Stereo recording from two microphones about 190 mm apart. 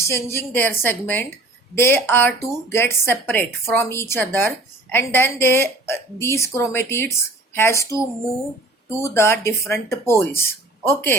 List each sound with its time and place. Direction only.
0.0 s speech: 15° left (ahead or behind)